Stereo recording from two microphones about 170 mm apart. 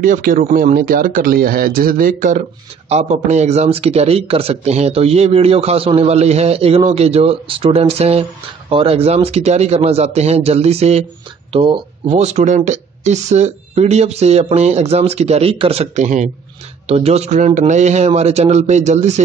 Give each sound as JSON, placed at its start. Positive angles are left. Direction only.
{"t": 0.0, "sound": "speech", "side_deg": -55}